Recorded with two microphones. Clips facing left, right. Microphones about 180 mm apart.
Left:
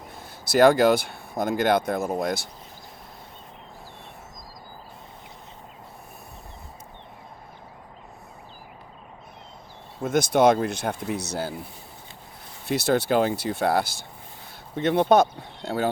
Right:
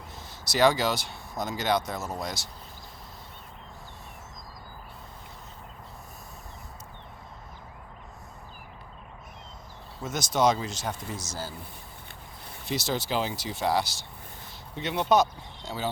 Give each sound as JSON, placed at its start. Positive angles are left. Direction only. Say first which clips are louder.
{"t": 0.4, "sound": "speech", "louder": "left 7 dB", "side_deg": 55}
{"t": 10.0, "sound": "speech", "louder": "left 6 dB", "side_deg": 55}
{"t": 12.6, "sound": "speech", "louder": "left 8 dB", "side_deg": 60}